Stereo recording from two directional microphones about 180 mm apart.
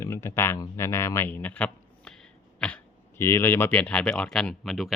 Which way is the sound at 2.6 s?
5° left (ahead or behind).